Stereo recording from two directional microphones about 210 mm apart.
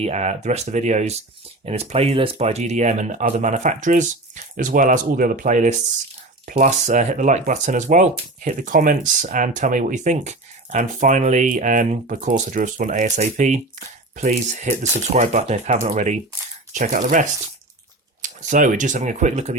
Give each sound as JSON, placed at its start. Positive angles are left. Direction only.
{"t": 0.0, "sound": "speech", "side_deg": -30}